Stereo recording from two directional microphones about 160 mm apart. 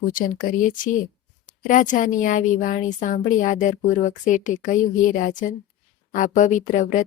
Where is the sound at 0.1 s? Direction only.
60° left (ahead or behind).